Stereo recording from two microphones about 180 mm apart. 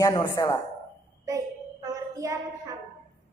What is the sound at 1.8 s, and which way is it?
Child singing, 20° right (ahead or behind).